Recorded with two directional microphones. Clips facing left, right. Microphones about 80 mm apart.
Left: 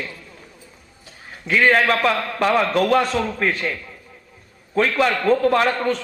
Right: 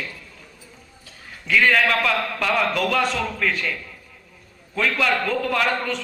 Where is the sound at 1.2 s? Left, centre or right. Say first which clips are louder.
Left 2 dB; left.